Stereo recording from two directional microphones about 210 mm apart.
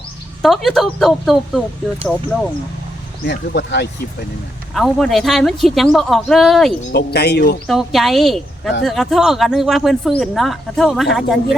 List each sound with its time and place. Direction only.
0.4 s speech: centre (ahead or behind)
3.2 s speech: 55° left (ahead or behind)
4.7 s speech: centre (ahead or behind)
6.9 s speech: 50° left (ahead or behind)
7.7 s speech: centre (ahead or behind)